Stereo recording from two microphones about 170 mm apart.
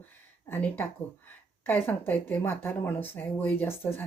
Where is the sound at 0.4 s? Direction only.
10° left (ahead or behind).